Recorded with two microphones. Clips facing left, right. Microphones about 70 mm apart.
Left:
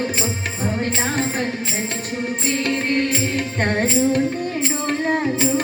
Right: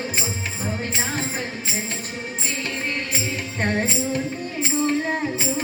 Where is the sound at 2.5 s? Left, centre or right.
Left.